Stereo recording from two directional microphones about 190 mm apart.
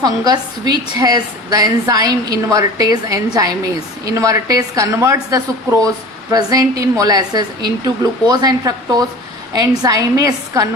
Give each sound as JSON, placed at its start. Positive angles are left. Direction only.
{"t": 0.0, "sound": "a woman's voice", "side_deg": -20}